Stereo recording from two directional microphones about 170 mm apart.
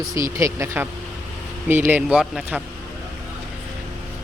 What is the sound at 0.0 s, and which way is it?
Speech, 20° right (ahead or behind).